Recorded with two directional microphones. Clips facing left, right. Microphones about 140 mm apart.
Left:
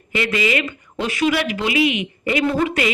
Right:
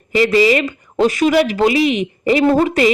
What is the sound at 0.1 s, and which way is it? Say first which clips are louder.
Speech: right 8 dB; 35° right (ahead or behind).